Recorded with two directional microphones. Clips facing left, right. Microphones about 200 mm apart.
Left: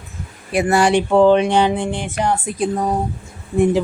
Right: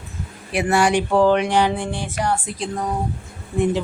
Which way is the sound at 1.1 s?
20° left (ahead or behind).